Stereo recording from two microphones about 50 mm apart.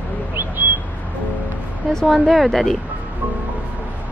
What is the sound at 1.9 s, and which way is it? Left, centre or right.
Speech, centre.